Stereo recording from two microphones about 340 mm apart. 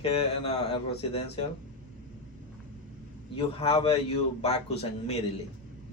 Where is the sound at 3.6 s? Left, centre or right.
Centre.